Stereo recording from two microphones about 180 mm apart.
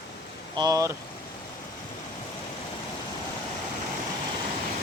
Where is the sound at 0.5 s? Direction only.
20° right (ahead or behind).